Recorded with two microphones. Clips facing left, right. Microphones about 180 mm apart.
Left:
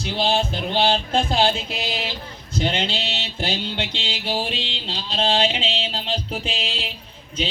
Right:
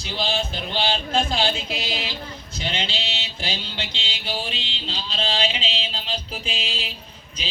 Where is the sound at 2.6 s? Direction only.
55° left (ahead or behind).